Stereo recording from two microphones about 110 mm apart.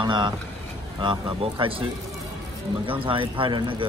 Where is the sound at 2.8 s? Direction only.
50° right (ahead or behind).